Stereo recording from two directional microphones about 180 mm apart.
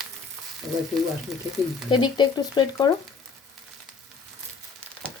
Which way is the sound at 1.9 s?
25° left (ahead or behind).